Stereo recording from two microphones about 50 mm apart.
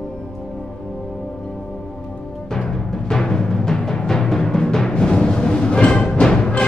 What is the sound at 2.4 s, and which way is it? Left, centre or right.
Timpani, centre.